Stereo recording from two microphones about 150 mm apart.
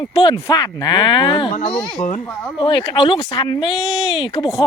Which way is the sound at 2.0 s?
50° left (ahead or behind).